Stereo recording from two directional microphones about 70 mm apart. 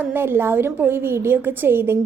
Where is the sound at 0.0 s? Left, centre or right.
Right.